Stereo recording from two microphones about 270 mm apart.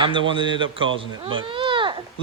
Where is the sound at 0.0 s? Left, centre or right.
Centre.